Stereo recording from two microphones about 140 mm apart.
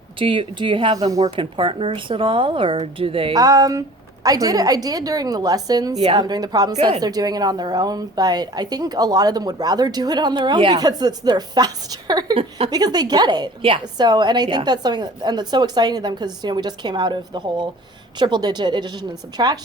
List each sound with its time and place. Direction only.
0.2 s a woman's voice: 35° right (ahead or behind)
3.3 s a woman's voice: 25° right (ahead or behind)
12.4 s a woman's voice: 40° right (ahead or behind)
12.7 s a woman's voice: 30° right (ahead or behind)